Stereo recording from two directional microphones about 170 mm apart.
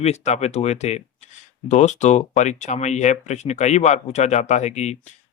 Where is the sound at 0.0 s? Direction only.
40° left (ahead or behind).